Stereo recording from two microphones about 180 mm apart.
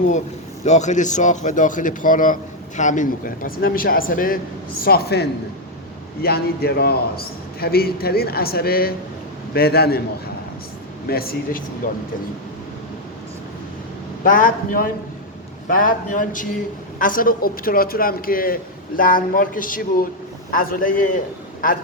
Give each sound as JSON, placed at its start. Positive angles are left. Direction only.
{"t": 0.6, "sound": "a man's voice", "side_deg": 40}
{"t": 11.1, "sound": "speech", "side_deg": 55}
{"t": 14.3, "sound": "a man's voice", "side_deg": 50}